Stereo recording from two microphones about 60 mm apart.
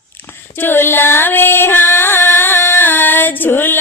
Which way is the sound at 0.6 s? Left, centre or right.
Left.